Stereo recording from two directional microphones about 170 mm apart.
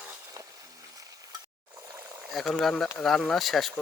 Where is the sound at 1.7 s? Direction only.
15° right (ahead or behind).